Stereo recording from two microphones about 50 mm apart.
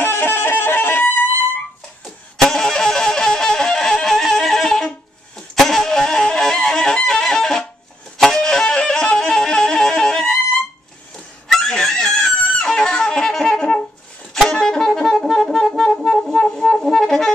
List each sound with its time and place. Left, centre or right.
0.0 s music: left
2.3 s music: centre
11.4 s fowl: centre
13.3 s wind instrument: centre
14.3 s saxophone: centre
15.8 s music: centre